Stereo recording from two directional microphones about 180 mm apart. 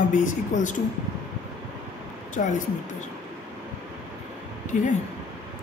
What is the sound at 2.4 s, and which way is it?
Speech, 45° left (ahead or behind).